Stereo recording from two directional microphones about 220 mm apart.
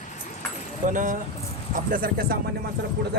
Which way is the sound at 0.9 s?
35° right (ahead or behind).